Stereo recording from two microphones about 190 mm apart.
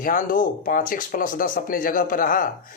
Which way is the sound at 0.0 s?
45° left (ahead or behind).